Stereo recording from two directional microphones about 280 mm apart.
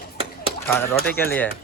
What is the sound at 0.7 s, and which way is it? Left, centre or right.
Speech, centre.